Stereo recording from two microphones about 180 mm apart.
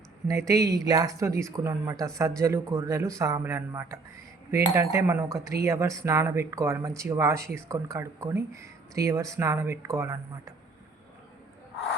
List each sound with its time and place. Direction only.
0.3 s speech: 20° right (ahead or behind)